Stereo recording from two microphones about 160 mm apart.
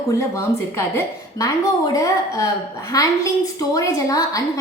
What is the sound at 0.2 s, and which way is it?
A woman's voice, 15° left (ahead or behind).